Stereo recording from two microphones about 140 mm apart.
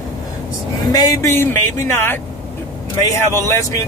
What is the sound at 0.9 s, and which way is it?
Speech, 25° left (ahead or behind).